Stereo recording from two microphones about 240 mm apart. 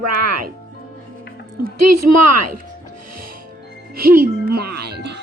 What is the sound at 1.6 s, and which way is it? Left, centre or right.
Speech, right.